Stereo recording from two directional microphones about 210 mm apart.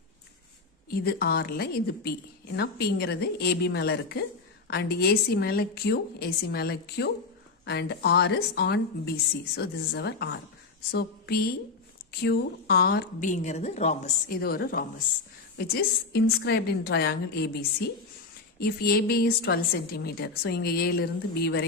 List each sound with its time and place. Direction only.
0.9 s a woman's voice: 45° left (ahead or behind)
14.4 s a woman's voice: 45° left (ahead or behind)